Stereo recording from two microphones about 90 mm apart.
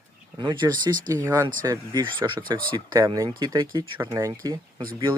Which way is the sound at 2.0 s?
60° right (ahead or behind).